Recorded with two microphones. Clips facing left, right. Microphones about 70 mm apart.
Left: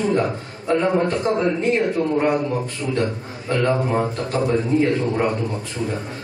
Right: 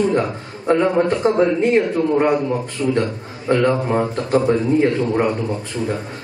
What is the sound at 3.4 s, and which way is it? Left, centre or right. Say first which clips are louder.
Speech: right 4 dB; right.